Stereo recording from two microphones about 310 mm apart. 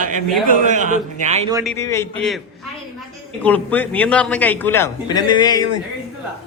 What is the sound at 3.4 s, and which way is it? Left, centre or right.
A man's voice, centre.